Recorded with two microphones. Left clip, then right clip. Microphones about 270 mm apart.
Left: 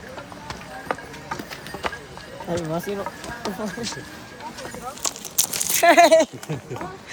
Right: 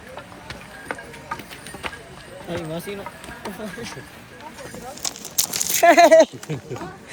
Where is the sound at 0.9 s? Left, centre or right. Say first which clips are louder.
Left 3 dB; left.